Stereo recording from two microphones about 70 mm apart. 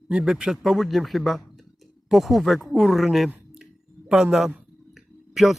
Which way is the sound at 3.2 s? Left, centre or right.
Centre.